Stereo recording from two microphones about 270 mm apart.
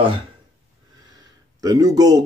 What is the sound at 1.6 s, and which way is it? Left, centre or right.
Speech, centre.